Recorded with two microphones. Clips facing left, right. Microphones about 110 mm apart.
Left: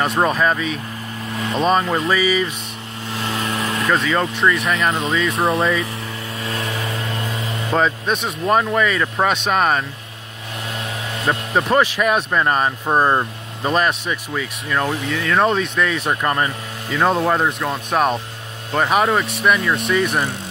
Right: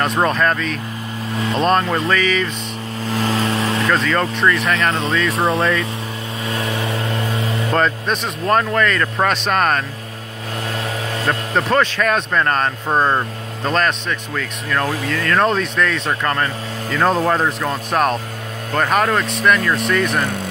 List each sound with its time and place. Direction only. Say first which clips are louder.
0.0 s speech: even; 5° left (ahead or behind)
3.1 s vehicle: right 5 dB; 35° right (ahead or behind)
3.8 s speech: left 1 dB; centre (ahead or behind)
6.4 s vehicle: right 3 dB; 25° right (ahead or behind)
7.7 s speech: left 1 dB; 5° left (ahead or behind)
11.2 s speech: left 1 dB; 10° left (ahead or behind)